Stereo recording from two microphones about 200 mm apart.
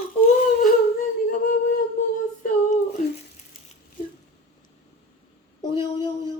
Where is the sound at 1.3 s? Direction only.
40° left (ahead or behind).